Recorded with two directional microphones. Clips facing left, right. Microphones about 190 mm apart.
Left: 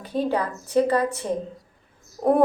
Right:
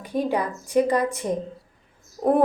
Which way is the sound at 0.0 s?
15° right (ahead or behind).